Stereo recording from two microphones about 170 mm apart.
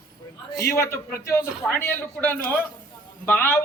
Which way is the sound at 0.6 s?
15° left (ahead or behind).